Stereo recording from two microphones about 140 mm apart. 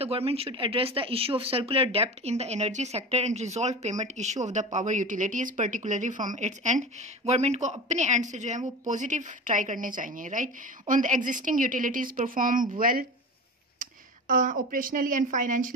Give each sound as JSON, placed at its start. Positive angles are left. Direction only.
{"t": 0.0, "sound": "a woman's voice", "side_deg": -45}
{"t": 13.7, "sound": "speech", "side_deg": -70}